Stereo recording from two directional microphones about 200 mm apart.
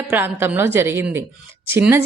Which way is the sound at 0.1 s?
10° right (ahead or behind).